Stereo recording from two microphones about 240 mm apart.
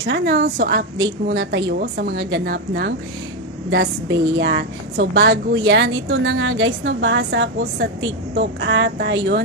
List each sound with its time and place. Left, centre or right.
0.0 s a woman's voice: right